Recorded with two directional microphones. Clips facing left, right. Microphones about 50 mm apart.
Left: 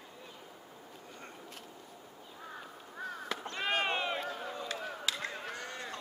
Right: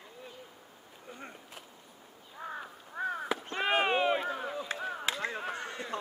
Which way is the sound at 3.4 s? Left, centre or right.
Right.